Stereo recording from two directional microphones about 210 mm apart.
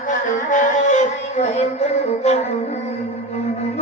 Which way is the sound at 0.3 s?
35° left (ahead or behind).